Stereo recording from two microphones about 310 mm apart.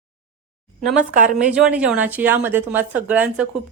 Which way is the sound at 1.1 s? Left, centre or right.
Right.